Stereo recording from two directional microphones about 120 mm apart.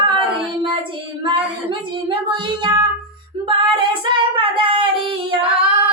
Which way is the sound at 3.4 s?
45° right (ahead or behind).